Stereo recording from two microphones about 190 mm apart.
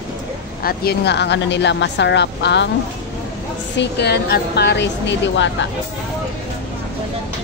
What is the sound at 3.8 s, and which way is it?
Speech, 60° left (ahead or behind).